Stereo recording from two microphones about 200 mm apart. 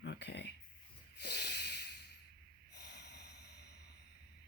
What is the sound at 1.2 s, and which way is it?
Snort, 55° left (ahead or behind).